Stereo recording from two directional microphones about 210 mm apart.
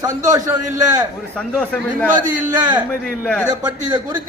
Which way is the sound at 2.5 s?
20° right (ahead or behind).